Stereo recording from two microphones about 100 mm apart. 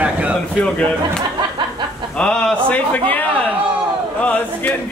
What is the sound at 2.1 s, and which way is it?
A man's voice, 10° left (ahead or behind).